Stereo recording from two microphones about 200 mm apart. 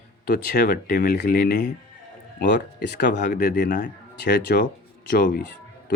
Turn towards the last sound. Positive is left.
turn(degrees=45)  # may be behind; listen again after turning